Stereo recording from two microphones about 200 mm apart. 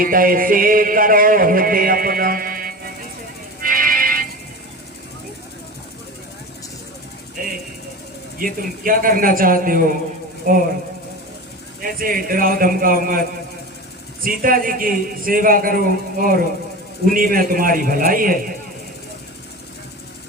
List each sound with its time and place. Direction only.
0.0 s music: 45° right (ahead or behind)
7.4 s a sound: 45° right (ahead or behind)
8.4 s a man's voice: 45° right (ahead or behind)
11.8 s a man's voice: 45° right (ahead or behind)
14.3 s a man's voice: 45° right (ahead or behind)